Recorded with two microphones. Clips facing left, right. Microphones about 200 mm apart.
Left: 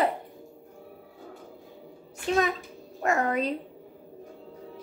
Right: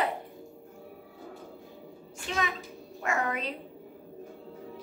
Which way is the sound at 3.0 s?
40° left (ahead or behind).